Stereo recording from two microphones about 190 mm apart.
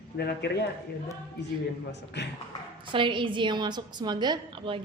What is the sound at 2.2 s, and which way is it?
Speech, 65° left (ahead or behind).